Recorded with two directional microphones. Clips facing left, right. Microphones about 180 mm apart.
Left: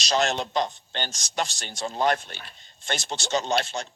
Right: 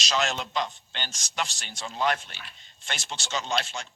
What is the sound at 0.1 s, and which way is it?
Speech, 40° left (ahead or behind).